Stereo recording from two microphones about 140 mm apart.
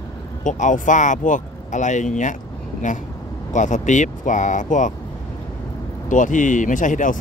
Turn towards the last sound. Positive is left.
turn(degrees=65)  # may be behind; listen again after turning